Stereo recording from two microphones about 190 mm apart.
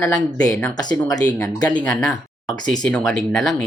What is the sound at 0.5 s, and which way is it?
Speech, 20° left (ahead or behind).